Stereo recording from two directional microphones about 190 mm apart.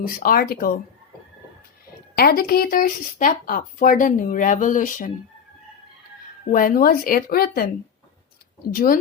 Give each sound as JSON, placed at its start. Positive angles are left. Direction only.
{"t": 0.0, "sound": "speech", "side_deg": 50}
{"t": 2.1, "sound": "speech", "side_deg": 55}
{"t": 6.5, "sound": "speech", "side_deg": 45}
{"t": 8.7, "sound": "speech", "side_deg": 50}